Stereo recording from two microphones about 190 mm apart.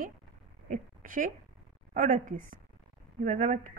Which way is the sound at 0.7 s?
45° right (ahead or behind).